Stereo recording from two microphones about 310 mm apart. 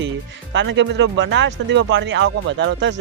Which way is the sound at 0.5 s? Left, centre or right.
Right.